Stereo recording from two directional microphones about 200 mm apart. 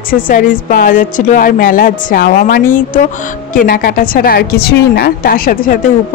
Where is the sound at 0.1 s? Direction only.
45° left (ahead or behind).